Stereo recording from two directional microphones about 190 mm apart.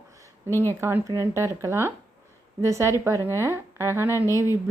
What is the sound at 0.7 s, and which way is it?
Speech, 15° right (ahead or behind).